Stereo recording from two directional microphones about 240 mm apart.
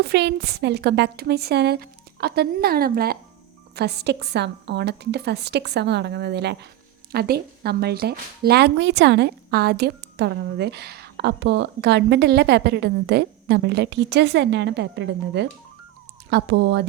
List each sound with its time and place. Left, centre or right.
0.0 s a woman's voice: right